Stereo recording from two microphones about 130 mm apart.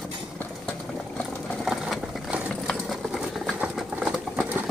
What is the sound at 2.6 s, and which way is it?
Sewing machine, centre (ahead or behind).